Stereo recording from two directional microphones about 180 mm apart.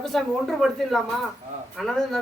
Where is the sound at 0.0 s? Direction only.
Centre (ahead or behind).